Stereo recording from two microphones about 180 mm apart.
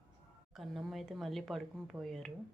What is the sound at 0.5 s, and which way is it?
Speech, centre (ahead or behind).